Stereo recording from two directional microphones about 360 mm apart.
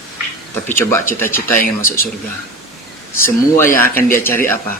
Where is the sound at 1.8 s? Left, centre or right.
Left.